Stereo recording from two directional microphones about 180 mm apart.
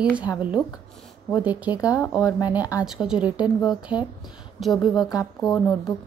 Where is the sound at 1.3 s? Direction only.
10° right (ahead or behind).